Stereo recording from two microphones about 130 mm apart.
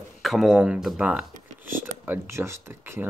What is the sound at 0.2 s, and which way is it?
Speech, centre (ahead or behind).